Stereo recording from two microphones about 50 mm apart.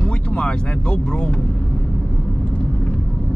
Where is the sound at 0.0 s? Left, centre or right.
Centre.